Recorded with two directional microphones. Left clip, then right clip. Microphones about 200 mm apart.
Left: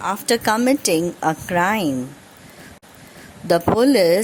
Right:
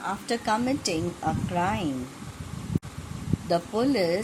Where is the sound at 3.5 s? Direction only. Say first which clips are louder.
Left 10 dB; 50° left (ahead or behind).